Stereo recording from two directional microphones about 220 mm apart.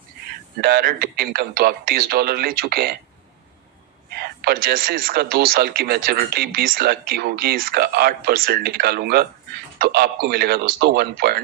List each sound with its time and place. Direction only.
0.6 s speech: 45° right (ahead or behind)
4.2 s speech: 45° right (ahead or behind)